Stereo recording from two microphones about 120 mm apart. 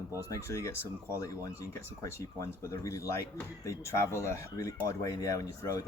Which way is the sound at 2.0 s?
25° left (ahead or behind).